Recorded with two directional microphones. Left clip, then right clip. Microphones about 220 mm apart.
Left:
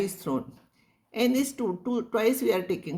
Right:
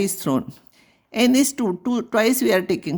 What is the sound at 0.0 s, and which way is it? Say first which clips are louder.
Speech: right 7 dB; 50° right (ahead or behind).